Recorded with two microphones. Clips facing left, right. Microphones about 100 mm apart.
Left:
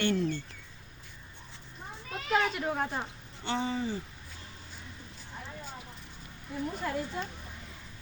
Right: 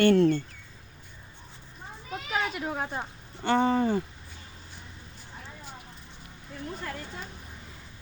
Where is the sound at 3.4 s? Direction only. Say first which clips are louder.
Right 8 dB; 55° right (ahead or behind).